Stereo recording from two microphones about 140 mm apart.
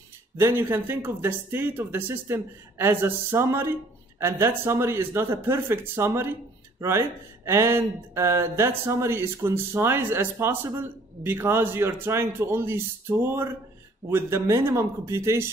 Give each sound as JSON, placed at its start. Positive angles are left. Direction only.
{"t": 0.4, "sound": "speech", "side_deg": -15}